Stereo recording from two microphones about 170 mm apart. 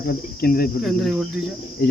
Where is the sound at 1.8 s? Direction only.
70° left (ahead or behind).